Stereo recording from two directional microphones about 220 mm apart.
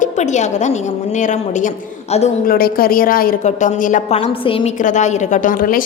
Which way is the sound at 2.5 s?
40° left (ahead or behind).